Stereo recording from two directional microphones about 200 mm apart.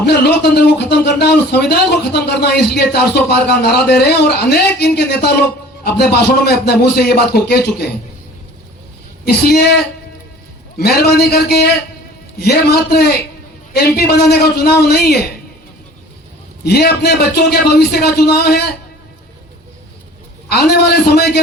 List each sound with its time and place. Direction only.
0.0 s speech: 55° left (ahead or behind)
9.2 s speech: 50° left (ahead or behind)
16.6 s speech: 50° left (ahead or behind)
20.5 s speech: 55° left (ahead or behind)